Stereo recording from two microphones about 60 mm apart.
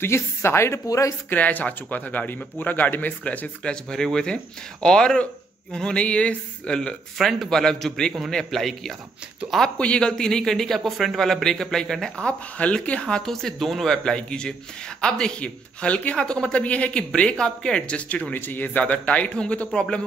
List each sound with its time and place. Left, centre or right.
0.0 s a woman's voice: left
0.8 s speech: left
1.3 s a man's voice: left
3.6 s a man's voice: centre
7.2 s a man's voice: centre
9.8 s a man's voice: centre
12.3 s a man's voice: left